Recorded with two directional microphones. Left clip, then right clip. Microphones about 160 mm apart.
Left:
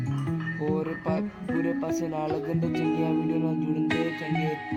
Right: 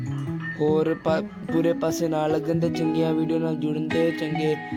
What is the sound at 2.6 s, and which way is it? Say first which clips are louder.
Speech: right 4 dB; 10° right (ahead or behind).